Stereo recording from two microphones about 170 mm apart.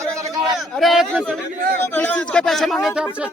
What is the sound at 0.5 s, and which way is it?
Speech, centre (ahead or behind).